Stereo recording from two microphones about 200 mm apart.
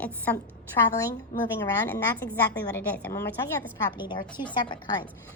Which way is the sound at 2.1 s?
10° left (ahead or behind).